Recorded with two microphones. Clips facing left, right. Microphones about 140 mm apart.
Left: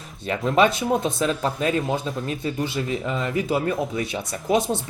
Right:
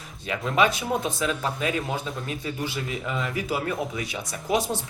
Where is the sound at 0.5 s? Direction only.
30° left (ahead or behind).